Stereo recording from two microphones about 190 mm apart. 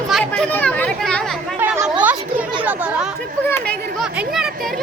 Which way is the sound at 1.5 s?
10° right (ahead or behind).